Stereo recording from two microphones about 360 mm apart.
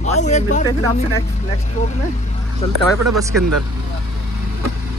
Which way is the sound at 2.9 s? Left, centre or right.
Centre.